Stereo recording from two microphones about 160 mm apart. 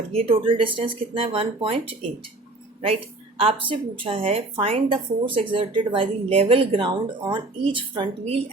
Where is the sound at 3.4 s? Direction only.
35° right (ahead or behind).